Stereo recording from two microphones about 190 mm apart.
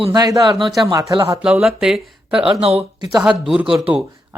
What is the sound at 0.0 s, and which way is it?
A man's voice, 20° right (ahead or behind).